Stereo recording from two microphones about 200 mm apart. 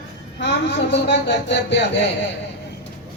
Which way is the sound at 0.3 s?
60° left (ahead or behind).